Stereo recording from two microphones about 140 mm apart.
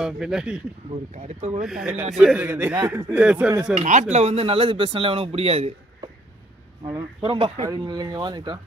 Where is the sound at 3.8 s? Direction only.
55° right (ahead or behind).